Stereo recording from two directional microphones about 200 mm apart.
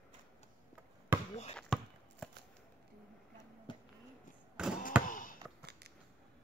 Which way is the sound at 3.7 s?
25° left (ahead or behind).